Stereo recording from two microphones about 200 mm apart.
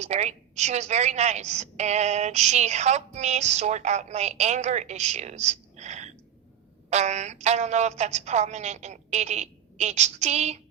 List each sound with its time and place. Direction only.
0.0 s a woman's voice: 35° right (ahead or behind)